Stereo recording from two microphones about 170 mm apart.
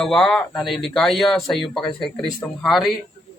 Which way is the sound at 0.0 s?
5° left (ahead or behind).